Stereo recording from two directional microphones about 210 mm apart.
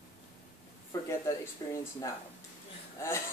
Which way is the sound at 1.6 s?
20° left (ahead or behind).